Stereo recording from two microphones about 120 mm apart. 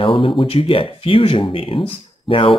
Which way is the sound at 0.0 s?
45° left (ahead or behind).